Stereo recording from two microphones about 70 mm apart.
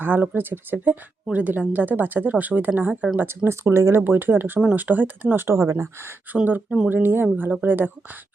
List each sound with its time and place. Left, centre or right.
0.0 s speech: right
3.2 s speech: right
5.5 s speech: right
6.3 s speech: right